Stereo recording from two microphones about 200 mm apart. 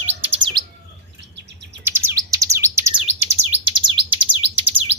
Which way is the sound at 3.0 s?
30° right (ahead or behind).